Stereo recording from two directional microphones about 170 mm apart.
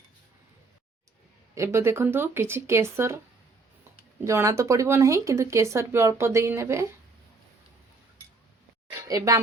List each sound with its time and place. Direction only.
1.5 s speech: 15° right (ahead or behind)
4.2 s speech: 15° right (ahead or behind)
9.0 s speech: 20° right (ahead or behind)